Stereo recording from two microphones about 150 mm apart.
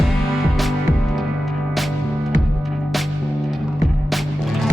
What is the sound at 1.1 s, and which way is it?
Music, centre (ahead or behind).